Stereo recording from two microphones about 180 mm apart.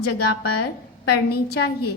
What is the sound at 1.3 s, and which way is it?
Speech, 60° left (ahead or behind).